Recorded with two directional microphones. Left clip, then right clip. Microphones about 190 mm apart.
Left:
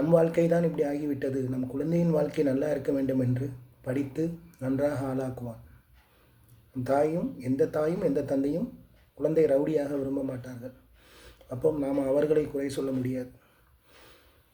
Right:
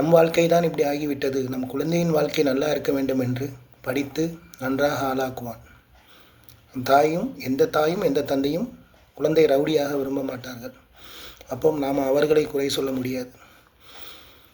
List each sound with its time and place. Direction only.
0.1 s a man's voice: 15° left (ahead or behind)
6.8 s a man's voice: 15° left (ahead or behind)